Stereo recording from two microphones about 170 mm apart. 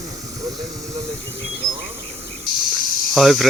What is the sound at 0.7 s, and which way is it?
Speech, 20° right (ahead or behind).